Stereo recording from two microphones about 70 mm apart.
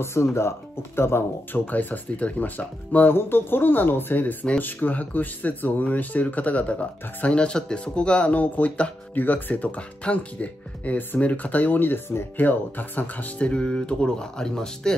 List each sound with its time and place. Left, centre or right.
0.0 s speech: left; by 15.0 s centre